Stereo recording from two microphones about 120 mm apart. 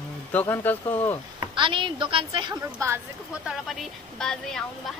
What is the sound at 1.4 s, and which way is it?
A woman's voice, 40° right (ahead or behind).